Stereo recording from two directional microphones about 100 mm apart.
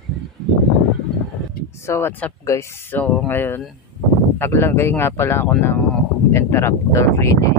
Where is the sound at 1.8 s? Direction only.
25° left (ahead or behind).